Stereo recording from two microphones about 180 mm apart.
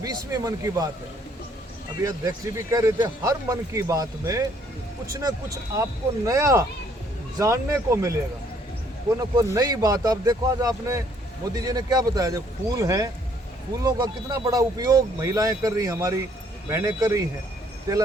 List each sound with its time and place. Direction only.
0.0 s speech: 20° right (ahead or behind)
2.0 s speech: 20° right (ahead or behind)
9.3 s speech: 20° right (ahead or behind)